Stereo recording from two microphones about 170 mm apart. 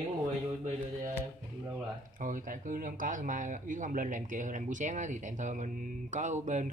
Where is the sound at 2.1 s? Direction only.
50° right (ahead or behind).